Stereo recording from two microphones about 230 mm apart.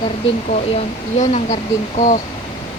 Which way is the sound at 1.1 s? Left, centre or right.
Left.